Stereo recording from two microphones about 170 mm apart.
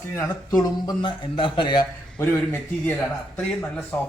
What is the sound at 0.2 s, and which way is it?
A man's voice, 20° left (ahead or behind).